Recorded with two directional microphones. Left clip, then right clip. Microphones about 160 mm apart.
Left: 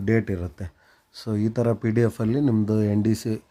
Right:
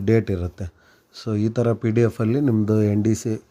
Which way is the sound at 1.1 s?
5° right (ahead or behind).